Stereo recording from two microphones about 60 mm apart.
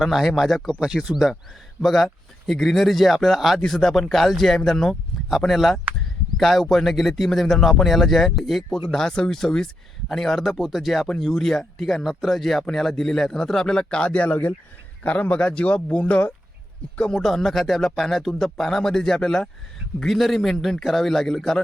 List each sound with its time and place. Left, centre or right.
0.0 s speech: centre
0.8 s speech: centre
3.6 s speech: centre
17.0 s speech: centre